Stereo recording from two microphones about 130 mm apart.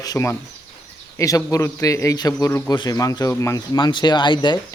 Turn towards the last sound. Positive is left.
turn(degrees=35)  # may be behind; listen again after turning